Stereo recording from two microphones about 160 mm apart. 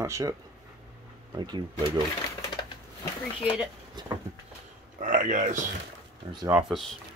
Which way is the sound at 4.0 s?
25° right (ahead or behind).